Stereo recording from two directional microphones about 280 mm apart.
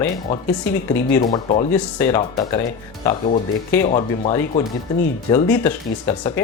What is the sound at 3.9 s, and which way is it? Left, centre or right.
Speech, left.